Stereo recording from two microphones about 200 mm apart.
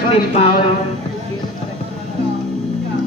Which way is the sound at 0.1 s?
30° left (ahead or behind).